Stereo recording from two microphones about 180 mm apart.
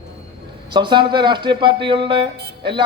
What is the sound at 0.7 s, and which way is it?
A man's voice, 25° right (ahead or behind).